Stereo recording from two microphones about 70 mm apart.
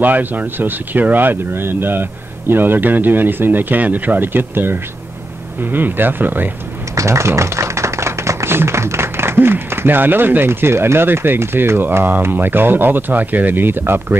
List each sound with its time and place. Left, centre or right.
0.0 s speech: right
7.0 s speech: right